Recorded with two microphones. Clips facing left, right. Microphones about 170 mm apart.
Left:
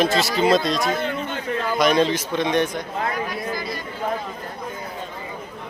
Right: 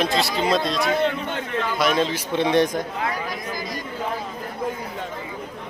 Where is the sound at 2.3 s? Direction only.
30° right (ahead or behind).